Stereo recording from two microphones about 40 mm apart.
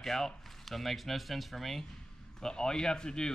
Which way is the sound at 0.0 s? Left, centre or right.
Centre.